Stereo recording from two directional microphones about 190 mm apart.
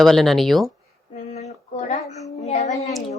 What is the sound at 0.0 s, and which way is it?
Speech, centre (ahead or behind).